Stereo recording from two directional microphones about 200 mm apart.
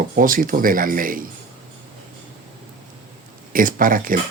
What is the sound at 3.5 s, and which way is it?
Speech, 45° right (ahead or behind).